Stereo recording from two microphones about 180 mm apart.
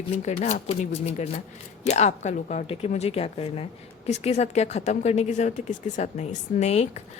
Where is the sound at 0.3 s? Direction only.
40° left (ahead or behind).